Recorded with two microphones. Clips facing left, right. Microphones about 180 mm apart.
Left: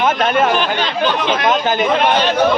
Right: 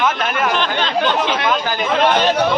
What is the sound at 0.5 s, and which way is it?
Speech, 10° left (ahead or behind).